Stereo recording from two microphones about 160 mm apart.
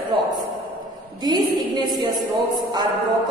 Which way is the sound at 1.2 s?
25° right (ahead or behind).